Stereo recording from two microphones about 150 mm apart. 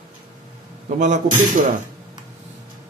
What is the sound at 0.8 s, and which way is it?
Speech, 55° right (ahead or behind).